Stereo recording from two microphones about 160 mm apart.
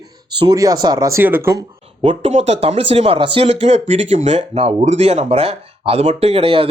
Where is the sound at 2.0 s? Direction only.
40° right (ahead or behind).